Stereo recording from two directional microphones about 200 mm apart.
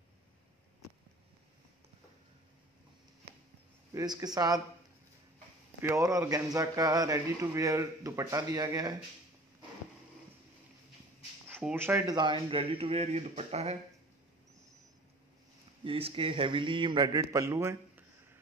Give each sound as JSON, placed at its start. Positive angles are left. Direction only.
{"t": 3.9, "sound": "a man's voice", "side_deg": -20}
{"t": 5.8, "sound": "a man's voice", "side_deg": -15}
{"t": 11.4, "sound": "a man's voice", "side_deg": -10}
{"t": 15.8, "sound": "a man's voice", "side_deg": -25}